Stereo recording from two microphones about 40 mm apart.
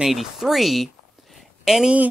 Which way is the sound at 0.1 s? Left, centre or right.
Centre.